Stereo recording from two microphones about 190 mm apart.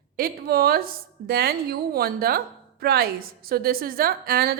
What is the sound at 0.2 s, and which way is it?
A woman's voice, 55° right (ahead or behind).